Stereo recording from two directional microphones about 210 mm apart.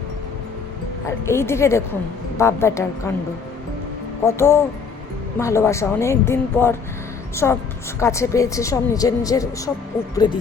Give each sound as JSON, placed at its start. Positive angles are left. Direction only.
{"t": 1.0, "sound": "a woman's voice", "side_deg": 10}
{"t": 4.3, "sound": "a woman's voice", "side_deg": 10}